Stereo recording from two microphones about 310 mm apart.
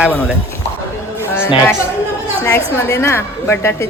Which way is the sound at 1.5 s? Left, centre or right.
Centre.